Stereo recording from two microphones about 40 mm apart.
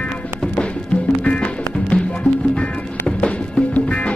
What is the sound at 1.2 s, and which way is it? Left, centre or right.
Music, left.